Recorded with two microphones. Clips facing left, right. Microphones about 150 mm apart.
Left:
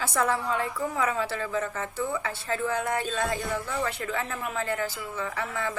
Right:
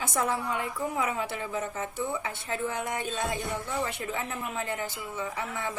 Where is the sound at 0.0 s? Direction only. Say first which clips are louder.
Left 3 dB; 20° right (ahead or behind).